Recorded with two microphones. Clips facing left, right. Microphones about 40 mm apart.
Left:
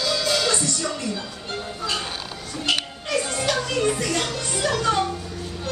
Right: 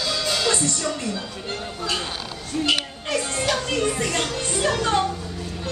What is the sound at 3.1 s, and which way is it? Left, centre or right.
Music, right.